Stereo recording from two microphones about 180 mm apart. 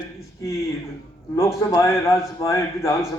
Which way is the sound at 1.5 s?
15° left (ahead or behind).